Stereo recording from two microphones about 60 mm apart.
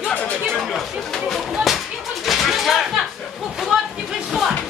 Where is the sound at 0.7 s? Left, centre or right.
Centre.